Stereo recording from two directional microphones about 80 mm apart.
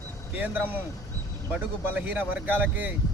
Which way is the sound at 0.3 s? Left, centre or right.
Right.